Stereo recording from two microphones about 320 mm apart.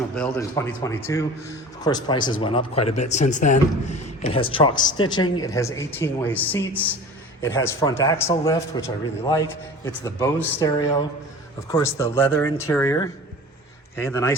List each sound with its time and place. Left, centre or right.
0.2 s a man's voice: centre